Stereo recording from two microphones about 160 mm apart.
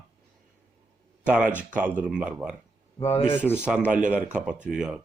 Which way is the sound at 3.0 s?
40° left (ahead or behind).